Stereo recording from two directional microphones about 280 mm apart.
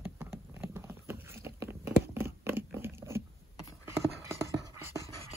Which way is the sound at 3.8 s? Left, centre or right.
Centre.